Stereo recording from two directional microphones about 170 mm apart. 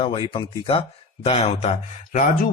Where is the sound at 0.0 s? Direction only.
30° left (ahead or behind).